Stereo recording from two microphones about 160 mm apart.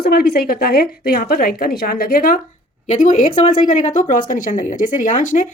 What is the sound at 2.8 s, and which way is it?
Speech, 50° left (ahead or behind).